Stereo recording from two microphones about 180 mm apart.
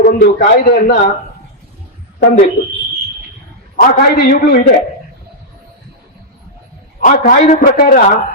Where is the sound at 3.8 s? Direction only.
55° left (ahead or behind).